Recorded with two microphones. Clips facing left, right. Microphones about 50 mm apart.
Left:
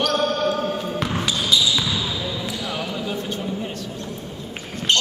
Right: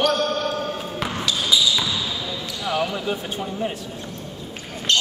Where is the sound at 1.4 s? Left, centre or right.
Centre.